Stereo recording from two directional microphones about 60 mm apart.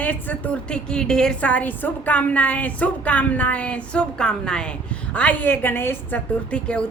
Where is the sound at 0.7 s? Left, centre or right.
Centre.